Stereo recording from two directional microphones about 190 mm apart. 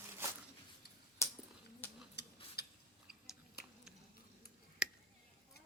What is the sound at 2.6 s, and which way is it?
Gears, 60° left (ahead or behind).